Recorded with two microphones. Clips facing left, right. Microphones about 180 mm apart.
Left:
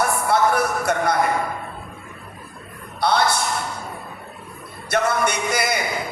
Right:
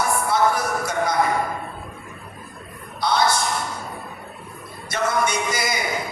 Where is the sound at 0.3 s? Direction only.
60° left (ahead or behind).